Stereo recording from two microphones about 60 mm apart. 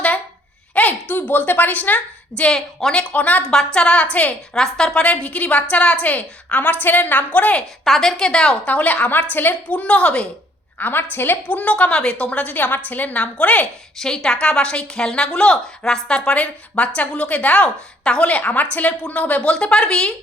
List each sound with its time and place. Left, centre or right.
0.7 s a sound: left
2.3 s a woman's voice: centre
3.5 s a woman's voice: centre
4.5 s a woman's voice: centre
7.9 s a woman's voice: centre
10.8 s a woman's voice: left
14.0 s a woman's voice: centre